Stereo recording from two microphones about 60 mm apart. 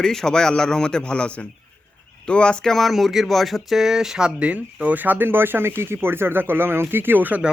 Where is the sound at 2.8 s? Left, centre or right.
Centre; by 7.4 s right.